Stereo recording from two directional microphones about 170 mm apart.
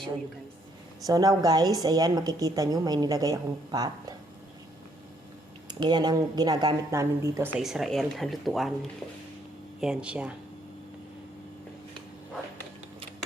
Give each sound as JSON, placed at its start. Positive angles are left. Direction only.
{"t": 1.0, "sound": "a woman's voice", "side_deg": -20}
{"t": 5.6, "sound": "a woman's voice", "side_deg": -25}
{"t": 7.5, "sound": "speech", "side_deg": 0}
{"t": 9.8, "sound": "speech", "side_deg": -5}